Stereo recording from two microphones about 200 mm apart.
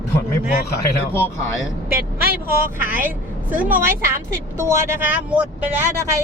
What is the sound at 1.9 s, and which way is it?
Speech, 50° right (ahead or behind).